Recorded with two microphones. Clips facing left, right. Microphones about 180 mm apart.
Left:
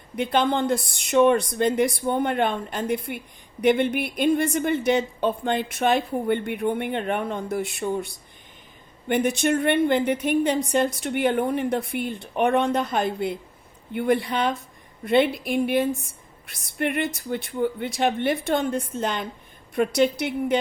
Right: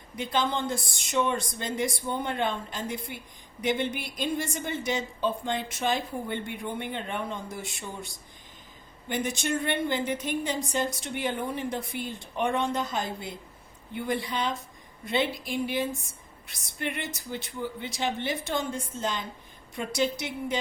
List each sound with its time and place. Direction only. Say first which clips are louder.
0.2 s a woman's voice: left 6 dB; 60° left (ahead or behind)